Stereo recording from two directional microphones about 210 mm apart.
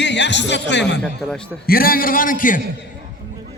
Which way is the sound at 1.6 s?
45° left (ahead or behind).